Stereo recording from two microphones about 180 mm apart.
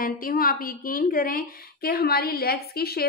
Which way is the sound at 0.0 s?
55° left (ahead or behind).